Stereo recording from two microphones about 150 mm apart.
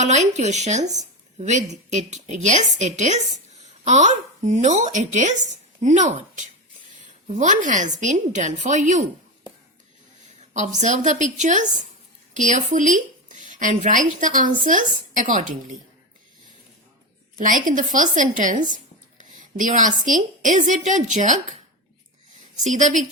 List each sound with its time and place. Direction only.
0.0 s a woman's voice: 50° right (ahead or behind)
10.5 s a woman's voice: 55° right (ahead or behind)
17.4 s a woman's voice: 60° right (ahead or behind)
22.6 s a woman's voice: 55° right (ahead or behind)